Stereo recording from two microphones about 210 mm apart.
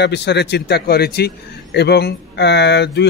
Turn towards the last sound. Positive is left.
turn(degrees=55)  # may be behind; listen again after turning